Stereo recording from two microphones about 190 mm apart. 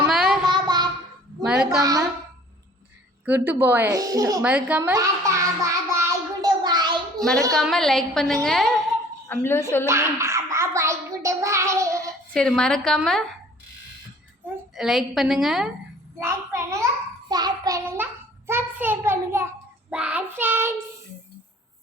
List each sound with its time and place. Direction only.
0.1 s child singing: centre (ahead or behind)
0.5 s child singing: 20° right (ahead or behind)
1.5 s a woman's voice: 5° right (ahead or behind)
1.8 s a sound: 20° right (ahead or behind)
3.2 s a woman's voice: 10° right (ahead or behind)
4.4 s child singing: 5° right (ahead or behind); by 7.3 s 20° right (ahead or behind)
7.5 s a woman's voice: centre (ahead or behind)
9.3 s speech: 10° left (ahead or behind)
9.8 s a sound: 15° right (ahead or behind)
12.3 s a woman's voice: 5° left (ahead or behind)
14.8 s a woman's voice: centre (ahead or behind)
16.2 s a woman's voice: 15° right (ahead or behind)
17.2 s child singing: 20° right (ahead or behind)
19.9 s a woman's voice: 5° right (ahead or behind)